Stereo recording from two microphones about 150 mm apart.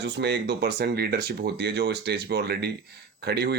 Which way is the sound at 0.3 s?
90° right.